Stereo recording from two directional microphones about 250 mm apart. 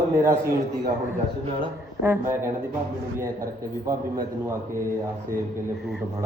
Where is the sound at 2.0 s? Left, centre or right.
Centre.